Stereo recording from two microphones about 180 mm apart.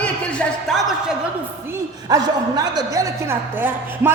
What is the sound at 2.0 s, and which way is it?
A woman's voice, 20° right (ahead or behind).